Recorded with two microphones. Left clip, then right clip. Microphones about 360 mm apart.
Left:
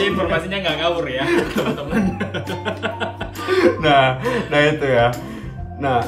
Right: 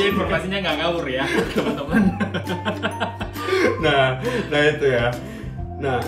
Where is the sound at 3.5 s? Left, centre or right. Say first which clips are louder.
Left 4 dB; centre.